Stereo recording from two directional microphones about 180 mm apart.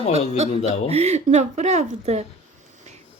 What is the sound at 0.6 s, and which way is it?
Speech, 35° right (ahead or behind).